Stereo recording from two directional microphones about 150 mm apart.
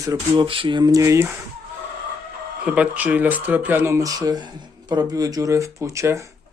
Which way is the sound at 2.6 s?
10° right (ahead or behind).